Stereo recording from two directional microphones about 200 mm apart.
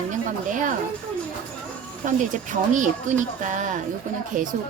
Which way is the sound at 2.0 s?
40° right (ahead or behind).